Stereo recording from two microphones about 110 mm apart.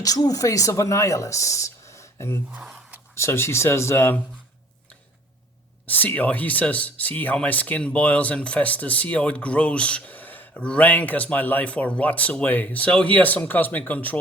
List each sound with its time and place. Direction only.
0.0 s speech: 35° left (ahead or behind)
2.5 s a sound: 10° right (ahead or behind)
3.2 s speech: 25° left (ahead or behind)
5.8 s speech: 15° left (ahead or behind)